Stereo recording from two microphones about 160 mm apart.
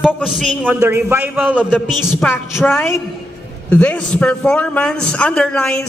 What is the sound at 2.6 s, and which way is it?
A man's voice, 15° left (ahead or behind).